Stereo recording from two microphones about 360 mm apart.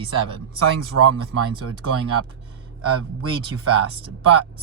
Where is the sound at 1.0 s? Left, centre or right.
Right.